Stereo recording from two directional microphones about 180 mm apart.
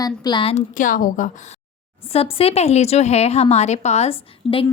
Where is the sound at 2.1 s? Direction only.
30° left (ahead or behind).